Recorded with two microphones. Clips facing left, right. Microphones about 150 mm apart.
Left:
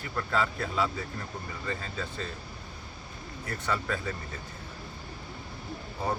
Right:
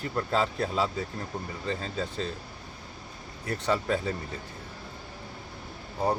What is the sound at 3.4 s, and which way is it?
Speech, 30° right (ahead or behind).